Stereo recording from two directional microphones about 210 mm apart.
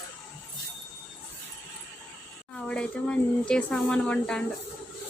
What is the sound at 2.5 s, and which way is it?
Speech, 5° left (ahead or behind).